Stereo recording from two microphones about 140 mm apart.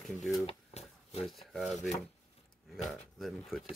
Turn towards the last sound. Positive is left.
turn(degrees=0)  # may be behind; listen again after turning